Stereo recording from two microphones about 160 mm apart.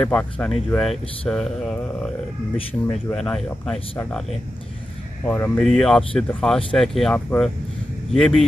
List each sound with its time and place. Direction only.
0.0 s speech: 5° left (ahead or behind)
5.2 s speech: 15° left (ahead or behind)
5.6 s speech: 5° left (ahead or behind)